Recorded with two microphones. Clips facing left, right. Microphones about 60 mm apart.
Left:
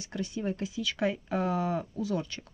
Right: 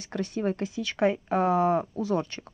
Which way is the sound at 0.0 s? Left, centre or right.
Right.